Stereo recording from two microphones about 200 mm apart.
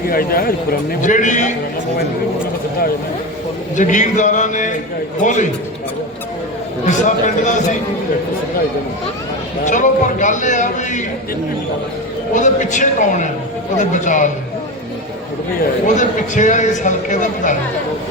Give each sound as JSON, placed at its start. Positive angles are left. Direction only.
{"t": 0.1, "sound": "a man's voice", "side_deg": 45}
{"t": 3.8, "sound": "a man's voice", "side_deg": 40}
{"t": 6.8, "sound": "a man's voice", "side_deg": 40}
{"t": 9.6, "sound": "a man's voice", "side_deg": 40}
{"t": 12.3, "sound": "a man's voice", "side_deg": 40}
{"t": 16.0, "sound": "a man's voice", "side_deg": 40}